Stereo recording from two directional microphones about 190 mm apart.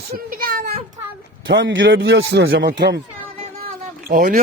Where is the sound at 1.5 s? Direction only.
80° right.